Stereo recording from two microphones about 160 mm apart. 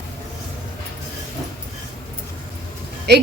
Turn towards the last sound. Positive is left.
turn(degrees=-90)